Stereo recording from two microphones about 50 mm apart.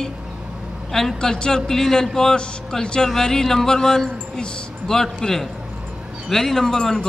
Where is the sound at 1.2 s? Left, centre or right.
Centre.